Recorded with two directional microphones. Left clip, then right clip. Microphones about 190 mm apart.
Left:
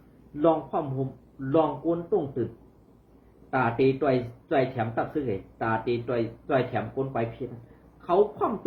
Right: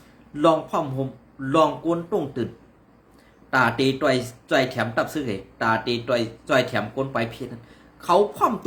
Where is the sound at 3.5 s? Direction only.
20° right (ahead or behind).